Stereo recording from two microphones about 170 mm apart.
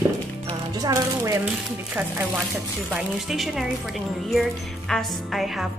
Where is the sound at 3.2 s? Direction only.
Centre (ahead or behind).